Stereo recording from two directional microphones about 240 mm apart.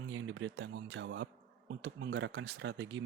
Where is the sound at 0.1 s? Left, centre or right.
Right.